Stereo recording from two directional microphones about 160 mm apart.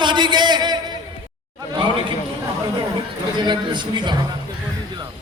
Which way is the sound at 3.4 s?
30° right (ahead or behind).